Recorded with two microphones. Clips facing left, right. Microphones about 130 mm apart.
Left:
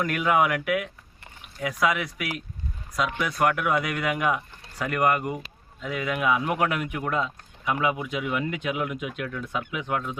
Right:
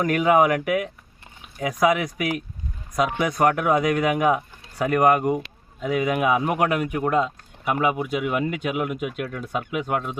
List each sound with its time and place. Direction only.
0.0 s speech: 45° right (ahead or behind)
3.2 s speech: 45° right (ahead or behind)